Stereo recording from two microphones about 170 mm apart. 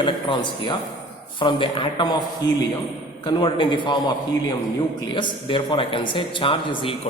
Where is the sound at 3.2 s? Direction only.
25° left (ahead or behind).